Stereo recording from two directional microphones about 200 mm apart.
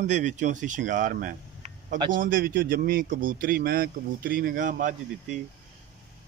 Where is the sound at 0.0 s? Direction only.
35° right (ahead or behind).